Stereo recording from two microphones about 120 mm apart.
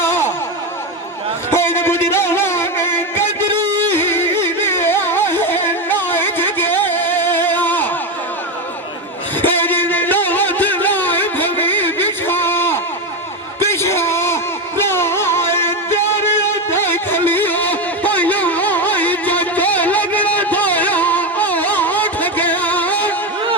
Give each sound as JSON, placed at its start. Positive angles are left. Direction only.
{"t": 0.0, "sound": "a sound", "side_deg": 20}
{"t": 1.5, "sound": "music", "side_deg": 20}
{"t": 3.9, "sound": "carnatic music", "side_deg": 20}
{"t": 9.6, "sound": "music", "side_deg": 15}
{"t": 13.7, "sound": "a sound", "side_deg": 20}
{"t": 14.8, "sound": "music", "side_deg": 20}